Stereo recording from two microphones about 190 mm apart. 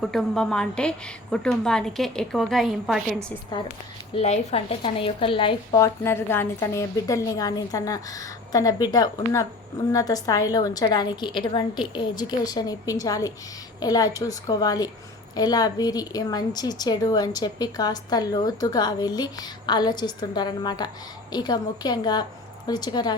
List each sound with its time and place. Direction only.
0.0 s a woman's voice: centre (ahead or behind)
4.1 s a woman's voice: 30° left (ahead or behind)